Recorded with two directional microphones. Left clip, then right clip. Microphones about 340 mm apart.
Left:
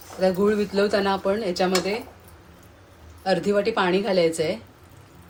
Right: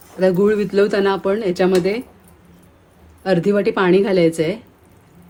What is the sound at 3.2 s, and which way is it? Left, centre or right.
Speech, right.